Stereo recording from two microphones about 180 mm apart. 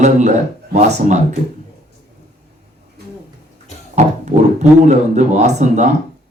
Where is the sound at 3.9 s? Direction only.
40° right (ahead or behind).